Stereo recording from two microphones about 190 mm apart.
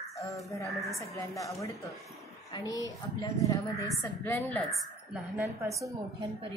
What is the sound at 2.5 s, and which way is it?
A woman's voice, 20° left (ahead or behind).